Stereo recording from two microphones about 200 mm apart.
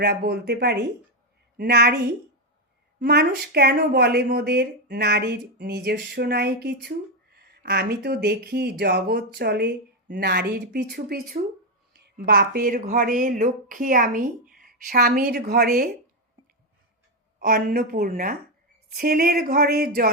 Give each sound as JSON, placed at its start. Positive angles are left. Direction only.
{"t": 0.0, "sound": "a woman's voice", "side_deg": -50}
{"t": 3.0, "sound": "speech", "side_deg": -55}
{"t": 14.6, "sound": "a sound", "side_deg": -45}
{"t": 15.3, "sound": "speech", "side_deg": -50}
{"t": 17.4, "sound": "speech", "side_deg": -45}